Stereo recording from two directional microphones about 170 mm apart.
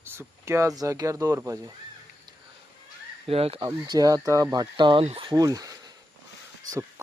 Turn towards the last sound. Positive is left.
turn(degrees=-15)  # may be behind; listen again after turning